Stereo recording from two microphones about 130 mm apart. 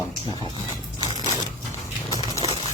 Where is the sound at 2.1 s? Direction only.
25° left (ahead or behind).